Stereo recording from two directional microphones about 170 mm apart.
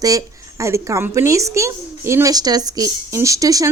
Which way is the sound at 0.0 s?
20° right (ahead or behind).